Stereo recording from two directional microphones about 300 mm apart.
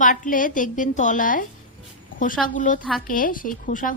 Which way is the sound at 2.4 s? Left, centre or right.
Left.